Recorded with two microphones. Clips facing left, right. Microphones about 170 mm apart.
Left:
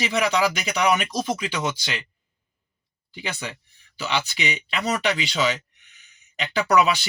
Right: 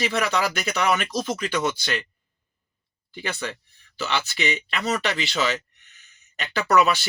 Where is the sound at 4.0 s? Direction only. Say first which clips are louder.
Even; 15° left (ahead or behind).